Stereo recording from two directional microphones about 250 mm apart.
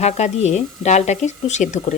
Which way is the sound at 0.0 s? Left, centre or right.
Left.